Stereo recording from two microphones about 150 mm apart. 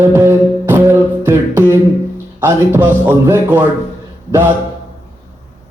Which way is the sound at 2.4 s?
15° right (ahead or behind).